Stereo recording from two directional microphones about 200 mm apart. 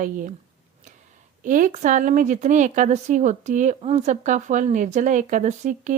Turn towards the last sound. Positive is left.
turn(degrees=-40)  # may be behind; listen again after turning